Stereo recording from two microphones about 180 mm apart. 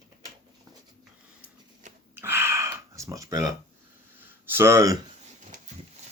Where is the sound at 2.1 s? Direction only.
15° right (ahead or behind).